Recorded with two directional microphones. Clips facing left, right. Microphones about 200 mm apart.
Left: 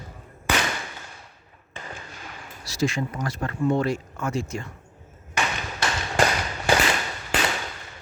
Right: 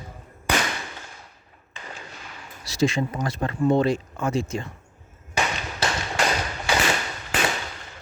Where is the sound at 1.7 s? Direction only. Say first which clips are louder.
Left 2 dB; 50° left (ahead or behind).